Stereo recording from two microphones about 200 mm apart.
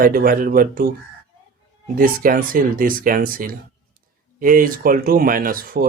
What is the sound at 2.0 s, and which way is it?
Speech, 45° right (ahead or behind).